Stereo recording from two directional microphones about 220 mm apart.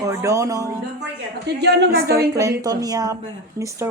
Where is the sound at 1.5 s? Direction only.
50° right (ahead or behind).